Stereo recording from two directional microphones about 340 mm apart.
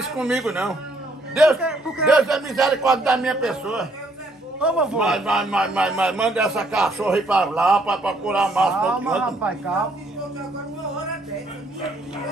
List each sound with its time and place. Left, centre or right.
0.2 s a man's voice: centre